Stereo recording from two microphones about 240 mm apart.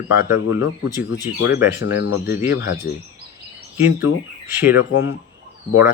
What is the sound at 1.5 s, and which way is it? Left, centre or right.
Speech, centre.